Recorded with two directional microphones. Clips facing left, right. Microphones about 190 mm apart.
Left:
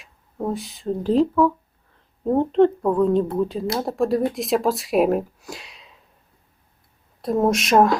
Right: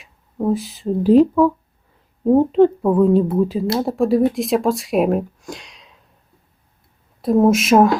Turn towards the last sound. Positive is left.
turn(degrees=0)  # may be behind; listen again after turning